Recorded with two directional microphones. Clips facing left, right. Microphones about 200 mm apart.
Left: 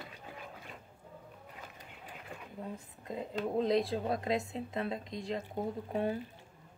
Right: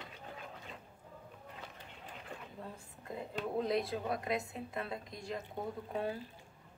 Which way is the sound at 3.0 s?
20° left (ahead or behind).